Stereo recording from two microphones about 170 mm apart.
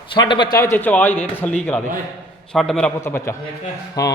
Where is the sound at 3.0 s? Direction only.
15° left (ahead or behind).